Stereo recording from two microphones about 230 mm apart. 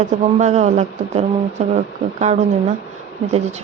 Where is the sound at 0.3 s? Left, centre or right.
Right.